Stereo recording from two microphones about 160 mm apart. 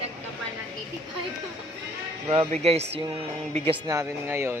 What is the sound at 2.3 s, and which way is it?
Speech, 40° right (ahead or behind).